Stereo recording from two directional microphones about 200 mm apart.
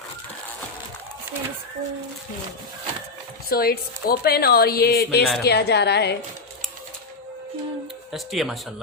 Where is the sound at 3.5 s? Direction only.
50° left (ahead or behind).